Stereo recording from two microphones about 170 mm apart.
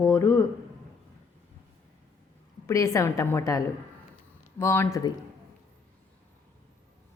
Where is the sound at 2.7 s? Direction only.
20° left (ahead or behind).